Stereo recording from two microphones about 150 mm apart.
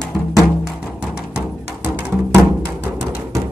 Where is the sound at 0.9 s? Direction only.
5° right (ahead or behind).